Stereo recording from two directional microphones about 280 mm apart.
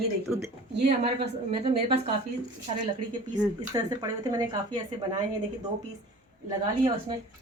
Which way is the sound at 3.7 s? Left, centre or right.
Centre.